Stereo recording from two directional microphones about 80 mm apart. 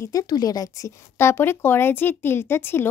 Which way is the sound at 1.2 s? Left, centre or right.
Left.